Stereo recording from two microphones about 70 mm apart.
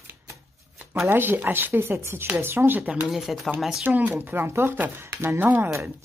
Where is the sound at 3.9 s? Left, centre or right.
Right.